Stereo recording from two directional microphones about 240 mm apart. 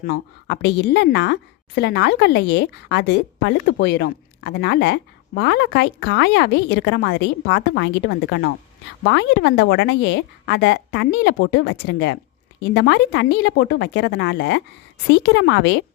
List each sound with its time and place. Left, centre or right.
0.0 s a woman's voice: left